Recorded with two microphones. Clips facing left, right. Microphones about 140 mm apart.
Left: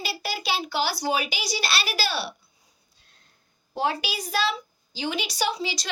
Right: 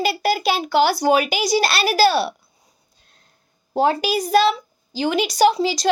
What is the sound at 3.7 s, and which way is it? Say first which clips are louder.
A woman's voice: right 9 dB; 45° right (ahead or behind).